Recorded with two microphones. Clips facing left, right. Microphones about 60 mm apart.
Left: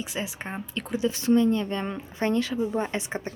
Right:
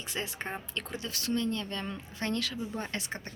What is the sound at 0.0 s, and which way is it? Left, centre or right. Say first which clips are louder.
A woman's voice: left 4 dB; centre.